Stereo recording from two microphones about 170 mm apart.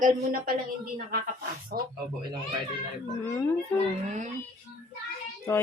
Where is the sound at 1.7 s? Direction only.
60° right (ahead or behind).